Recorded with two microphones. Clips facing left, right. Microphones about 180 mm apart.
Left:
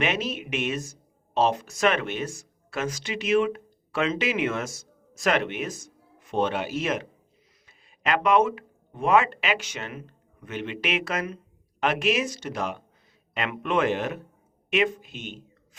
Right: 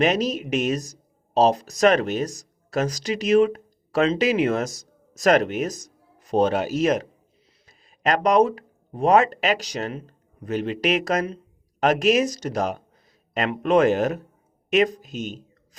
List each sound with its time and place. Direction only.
0.0 s speech: 40° right (ahead or behind)